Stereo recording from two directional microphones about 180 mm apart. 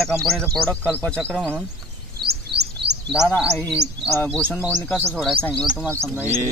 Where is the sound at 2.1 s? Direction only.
65° right (ahead or behind).